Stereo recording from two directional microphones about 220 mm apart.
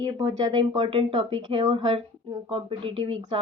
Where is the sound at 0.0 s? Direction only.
15° right (ahead or behind).